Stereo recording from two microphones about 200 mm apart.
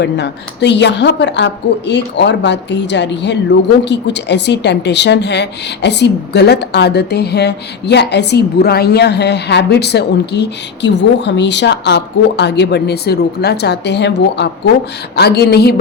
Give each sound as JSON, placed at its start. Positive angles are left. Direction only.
{"t": 0.0, "sound": "a woman's voice", "side_deg": 60}